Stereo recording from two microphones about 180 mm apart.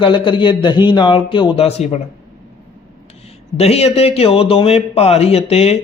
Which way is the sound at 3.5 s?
35° left (ahead or behind).